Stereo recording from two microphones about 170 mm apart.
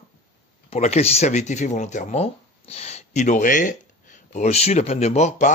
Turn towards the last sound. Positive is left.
turn(degrees=45)  # may be behind; listen again after turning